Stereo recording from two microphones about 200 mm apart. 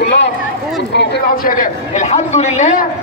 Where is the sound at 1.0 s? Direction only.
50° left (ahead or behind); by 2.8 s 35° left (ahead or behind).